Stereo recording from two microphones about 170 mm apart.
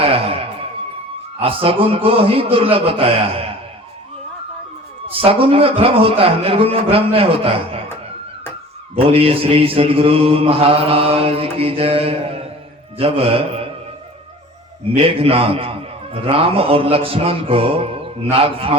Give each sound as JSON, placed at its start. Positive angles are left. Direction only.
{"t": 0.0, "sound": "music", "side_deg": -35}
{"t": 1.4, "sound": "a man's voice", "side_deg": -35}
{"t": 5.0, "sound": "a man's voice", "side_deg": -35}
{"t": 9.0, "sound": "a man's voice", "side_deg": -35}
{"t": 14.9, "sound": "a man's voice", "side_deg": -35}